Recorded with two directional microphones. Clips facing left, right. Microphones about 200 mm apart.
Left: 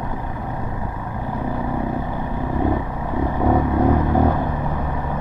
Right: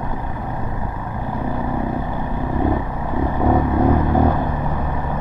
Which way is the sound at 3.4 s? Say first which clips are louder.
Right 1 dB; 25° right (ahead or behind).